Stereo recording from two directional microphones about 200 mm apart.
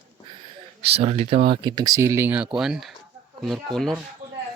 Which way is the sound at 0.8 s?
30° right (ahead or behind).